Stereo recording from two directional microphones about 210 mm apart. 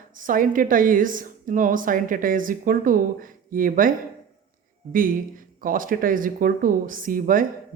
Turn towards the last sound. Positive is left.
turn(degrees=-40)  # may be behind; listen again after turning